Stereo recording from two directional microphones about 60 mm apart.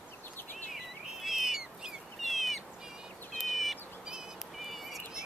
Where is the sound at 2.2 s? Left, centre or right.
Centre.